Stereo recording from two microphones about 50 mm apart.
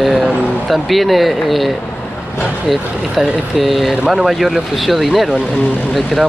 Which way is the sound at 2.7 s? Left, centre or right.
Centre.